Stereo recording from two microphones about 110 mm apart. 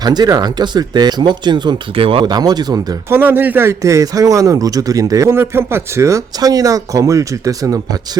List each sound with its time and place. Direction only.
0.0 s speech: 40° right (ahead or behind); by 2.2 s 55° right (ahead or behind)
2.2 s speech: 40° right (ahead or behind)
3.1 s a man's voice: 20° right (ahead or behind)